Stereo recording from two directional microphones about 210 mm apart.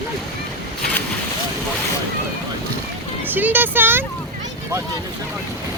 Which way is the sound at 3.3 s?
10° right (ahead or behind).